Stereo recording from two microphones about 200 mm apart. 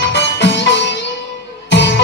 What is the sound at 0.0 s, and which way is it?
Music, 60° left (ahead or behind).